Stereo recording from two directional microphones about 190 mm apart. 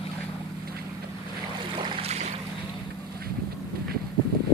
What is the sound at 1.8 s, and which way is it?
Boat, 30° right (ahead or behind).